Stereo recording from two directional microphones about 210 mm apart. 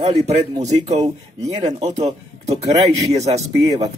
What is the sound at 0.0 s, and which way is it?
Speech, 30° right (ahead or behind).